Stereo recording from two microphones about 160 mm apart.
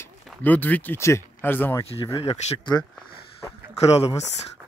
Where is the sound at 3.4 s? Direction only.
20° left (ahead or behind).